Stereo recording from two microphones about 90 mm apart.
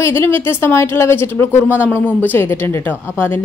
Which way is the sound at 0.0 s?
25° left (ahead or behind).